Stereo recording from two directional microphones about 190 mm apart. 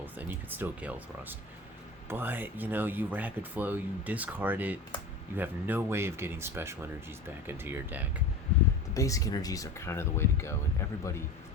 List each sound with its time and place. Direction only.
0.0 s speech: 10° right (ahead or behind)
8.9 s speech: 15° left (ahead or behind)